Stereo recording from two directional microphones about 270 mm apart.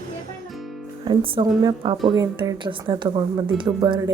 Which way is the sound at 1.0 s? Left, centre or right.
Centre.